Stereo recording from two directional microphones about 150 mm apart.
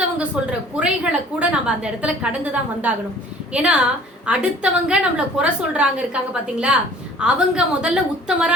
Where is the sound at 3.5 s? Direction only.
5° right (ahead or behind).